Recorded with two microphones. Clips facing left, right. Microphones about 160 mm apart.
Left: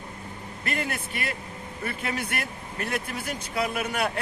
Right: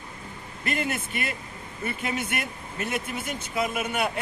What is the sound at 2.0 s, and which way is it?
A man's voice, centre (ahead or behind).